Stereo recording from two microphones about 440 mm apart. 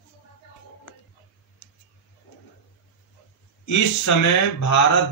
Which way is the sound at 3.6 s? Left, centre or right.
Left.